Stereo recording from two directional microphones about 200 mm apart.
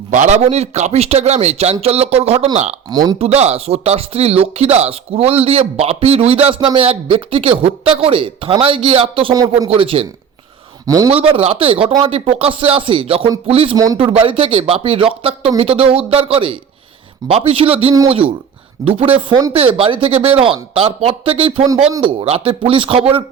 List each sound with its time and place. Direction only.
0.1 s speech: 35° right (ahead or behind)
2.9 s speech: 20° right (ahead or behind)
3.2 s speech: 30° right (ahead or behind)
10.8 s a man's voice: 15° right (ahead or behind)
11.1 s speech: 30° right (ahead or behind)